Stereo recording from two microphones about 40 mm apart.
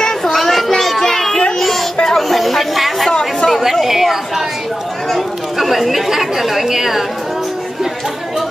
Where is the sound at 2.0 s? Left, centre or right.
Centre.